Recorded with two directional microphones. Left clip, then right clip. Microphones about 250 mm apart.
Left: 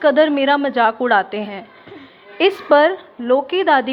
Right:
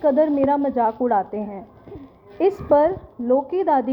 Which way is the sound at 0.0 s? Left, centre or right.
Left.